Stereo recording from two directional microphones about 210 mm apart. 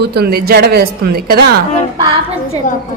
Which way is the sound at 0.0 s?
50° right (ahead or behind).